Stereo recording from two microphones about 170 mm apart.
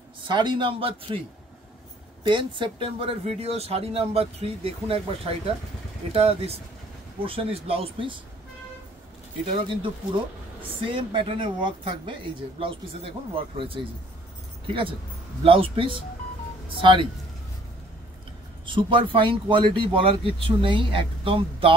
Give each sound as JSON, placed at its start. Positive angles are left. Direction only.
{"t": 0.3, "sound": "speech", "side_deg": -25}
{"t": 2.2, "sound": "speech", "side_deg": -30}
{"t": 9.6, "sound": "speech", "side_deg": -30}
{"t": 18.7, "sound": "speech", "side_deg": -30}